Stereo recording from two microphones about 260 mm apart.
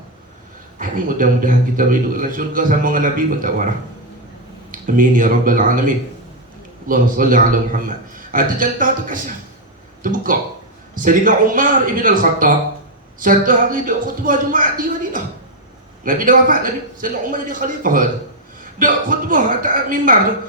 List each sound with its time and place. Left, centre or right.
0.8 s a man's voice: right
4.9 s a man's voice: right